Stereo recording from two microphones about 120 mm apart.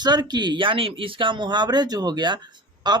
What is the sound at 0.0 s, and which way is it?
Speech, 35° right (ahead or behind).